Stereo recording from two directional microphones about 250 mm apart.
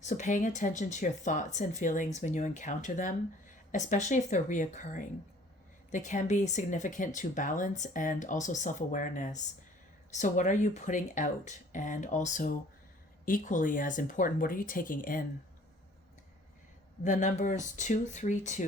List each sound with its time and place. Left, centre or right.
0.0 s speech: left
17.0 s speech: left